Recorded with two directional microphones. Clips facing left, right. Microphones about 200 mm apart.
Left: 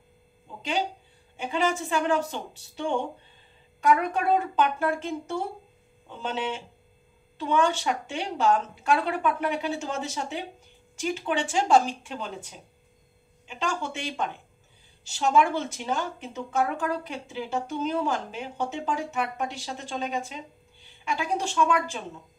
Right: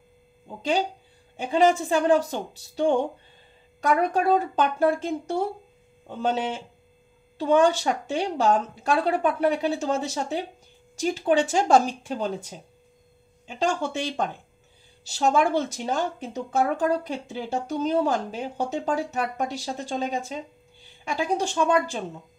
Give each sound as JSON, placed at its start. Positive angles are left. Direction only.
{"t": 1.3, "sound": "a woman's voice", "side_deg": -40}
{"t": 13.5, "sound": "a woman's voice", "side_deg": -40}